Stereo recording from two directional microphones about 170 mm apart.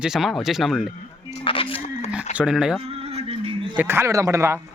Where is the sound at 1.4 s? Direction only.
35° left (ahead or behind).